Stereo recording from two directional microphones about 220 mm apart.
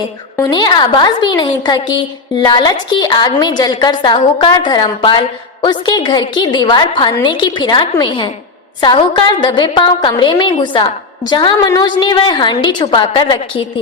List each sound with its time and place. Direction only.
0.3 s a woman's voice: 20° left (ahead or behind)